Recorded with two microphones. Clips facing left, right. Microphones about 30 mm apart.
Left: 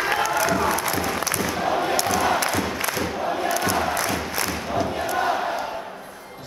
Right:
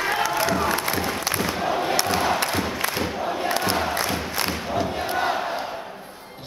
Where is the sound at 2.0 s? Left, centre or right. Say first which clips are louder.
Even; right.